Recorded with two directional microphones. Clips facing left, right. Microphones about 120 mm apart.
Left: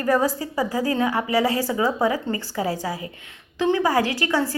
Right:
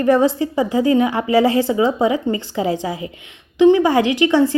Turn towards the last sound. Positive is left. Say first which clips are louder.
# right 8 dB
turn(degrees=-20)  # may be behind; listen again after turning